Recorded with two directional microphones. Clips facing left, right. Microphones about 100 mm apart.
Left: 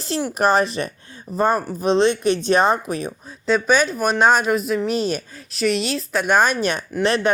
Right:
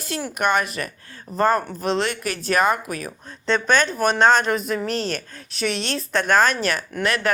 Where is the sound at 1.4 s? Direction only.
15° left (ahead or behind).